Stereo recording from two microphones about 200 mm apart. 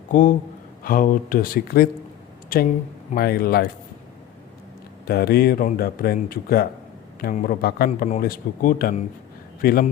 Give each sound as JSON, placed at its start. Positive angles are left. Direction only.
{"t": 0.1, "sound": "a man's voice", "side_deg": 40}
{"t": 5.0, "sound": "speech", "side_deg": 50}
{"t": 7.9, "sound": "speech", "side_deg": 35}